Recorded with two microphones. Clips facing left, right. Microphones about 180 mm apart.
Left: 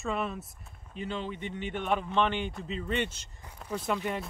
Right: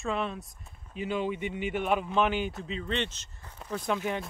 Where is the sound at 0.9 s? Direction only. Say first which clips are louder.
Right 5 dB; 10° right (ahead or behind).